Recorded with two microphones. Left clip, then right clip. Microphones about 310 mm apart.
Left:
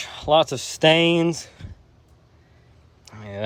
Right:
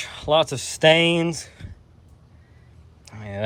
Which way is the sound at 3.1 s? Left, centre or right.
Centre.